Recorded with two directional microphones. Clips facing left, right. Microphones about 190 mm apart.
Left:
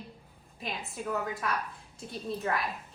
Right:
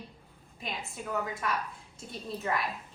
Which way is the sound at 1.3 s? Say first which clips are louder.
Even; centre (ahead or behind).